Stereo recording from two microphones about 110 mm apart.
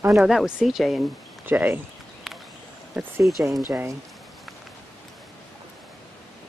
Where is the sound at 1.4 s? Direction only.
20° right (ahead or behind).